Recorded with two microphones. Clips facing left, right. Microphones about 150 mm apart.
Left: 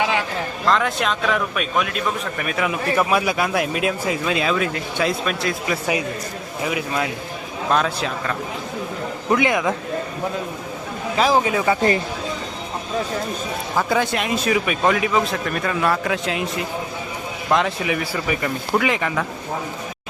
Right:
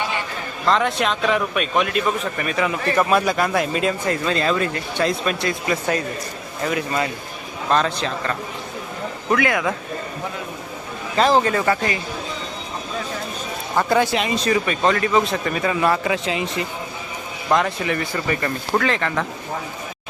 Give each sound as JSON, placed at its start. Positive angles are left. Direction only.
{"t": 0.7, "sound": "speech", "side_deg": 0}
{"t": 9.3, "sound": "a man's voice", "side_deg": 20}
{"t": 11.2, "sound": "speech", "side_deg": 5}
{"t": 13.7, "sound": "speech", "side_deg": 0}